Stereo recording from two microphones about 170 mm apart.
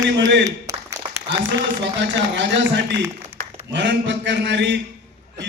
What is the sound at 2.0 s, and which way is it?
A man's voice, 90° right.